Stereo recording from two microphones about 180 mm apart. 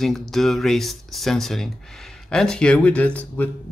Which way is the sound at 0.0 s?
Centre (ahead or behind).